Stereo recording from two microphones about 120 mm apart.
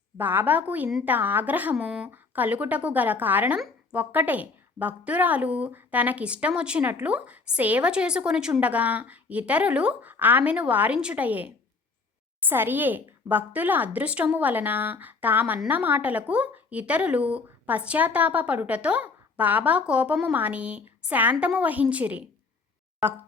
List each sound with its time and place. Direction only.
0.2 s speech: 15° right (ahead or behind)